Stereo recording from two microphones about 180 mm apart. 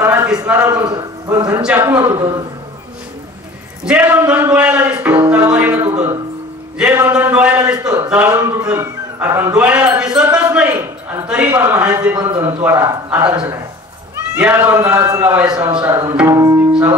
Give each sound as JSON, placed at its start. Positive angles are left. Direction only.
{"t": 0.0, "sound": "a sound", "side_deg": -10}
{"t": 0.5, "sound": "a man's voice", "side_deg": -10}
{"t": 3.8, "sound": "a man's voice", "side_deg": -10}
{"t": 11.5, "sound": "a man's voice", "side_deg": -20}
{"t": 11.8, "sound": "a man's voice", "side_deg": -10}